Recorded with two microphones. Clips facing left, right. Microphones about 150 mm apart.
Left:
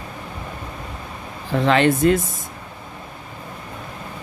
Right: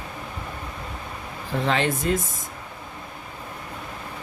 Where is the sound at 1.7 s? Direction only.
70° left (ahead or behind).